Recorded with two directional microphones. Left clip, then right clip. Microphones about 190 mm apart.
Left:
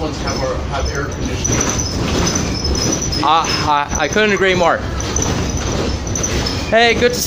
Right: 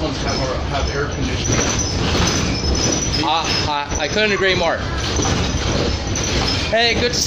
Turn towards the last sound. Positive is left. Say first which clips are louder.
# left 4 dB
turn(degrees=25)  # may be behind; listen again after turning